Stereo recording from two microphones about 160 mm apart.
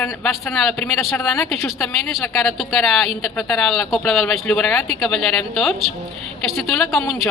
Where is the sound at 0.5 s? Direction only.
Centre (ahead or behind).